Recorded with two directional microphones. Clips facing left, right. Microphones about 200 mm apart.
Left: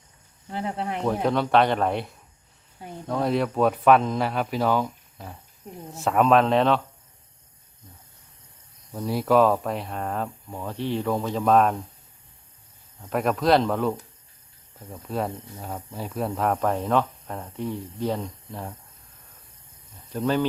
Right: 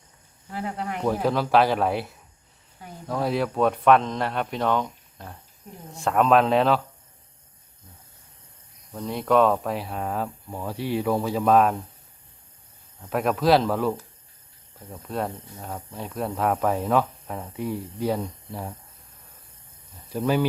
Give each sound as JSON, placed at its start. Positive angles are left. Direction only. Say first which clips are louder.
{"t": 0.5, "sound": "speech", "louder": "left 1 dB", "side_deg": 30}
{"t": 1.0, "sound": "speech", "louder": "even", "side_deg": 0}
{"t": 8.9, "sound": "speech", "louder": "left 1 dB", "side_deg": 5}
{"t": 13.0, "sound": "speech", "louder": "even", "side_deg": 0}
{"t": 20.1, "sound": "speech", "louder": "right 1 dB", "side_deg": -10}